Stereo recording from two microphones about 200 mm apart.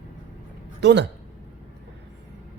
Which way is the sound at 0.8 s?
60° right (ahead or behind).